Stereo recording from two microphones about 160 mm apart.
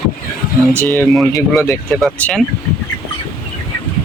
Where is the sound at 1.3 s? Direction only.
20° left (ahead or behind).